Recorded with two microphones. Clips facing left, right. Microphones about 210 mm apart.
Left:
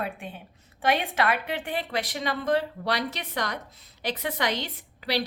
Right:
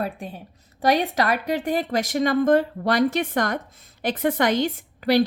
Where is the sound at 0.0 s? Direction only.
40° right (ahead or behind).